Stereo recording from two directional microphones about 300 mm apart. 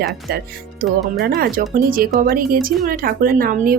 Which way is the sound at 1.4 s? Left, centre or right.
Right.